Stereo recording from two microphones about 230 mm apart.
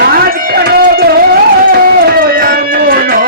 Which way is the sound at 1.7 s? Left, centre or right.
Right.